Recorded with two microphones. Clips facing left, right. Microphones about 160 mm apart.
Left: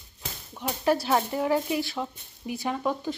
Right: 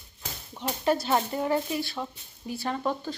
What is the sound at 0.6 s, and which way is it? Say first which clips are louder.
Speech: left 1 dB; 5° left (ahead or behind).